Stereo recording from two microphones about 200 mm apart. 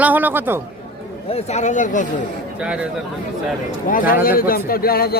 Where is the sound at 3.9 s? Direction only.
45° left (ahead or behind).